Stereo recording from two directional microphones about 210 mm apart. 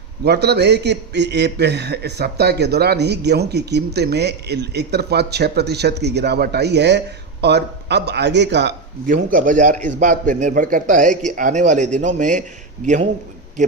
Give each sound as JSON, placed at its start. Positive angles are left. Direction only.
{"t": 0.3, "sound": "a man's voice", "side_deg": -50}
{"t": 9.0, "sound": "speech", "side_deg": -40}